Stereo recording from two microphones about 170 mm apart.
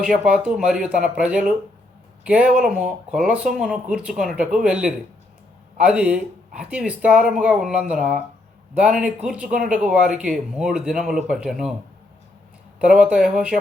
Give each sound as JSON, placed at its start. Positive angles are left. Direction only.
{"t": 0.0, "sound": "speech", "side_deg": -5}
{"t": 12.8, "sound": "speech", "side_deg": -5}